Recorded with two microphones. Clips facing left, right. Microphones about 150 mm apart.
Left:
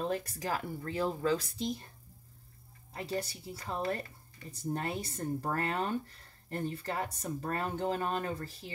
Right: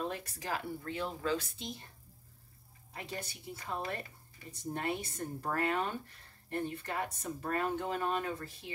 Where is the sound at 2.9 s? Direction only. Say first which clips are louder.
Left 6 dB; 35° left (ahead or behind).